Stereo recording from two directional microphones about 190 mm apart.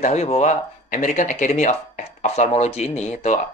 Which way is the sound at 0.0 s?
35° left (ahead or behind).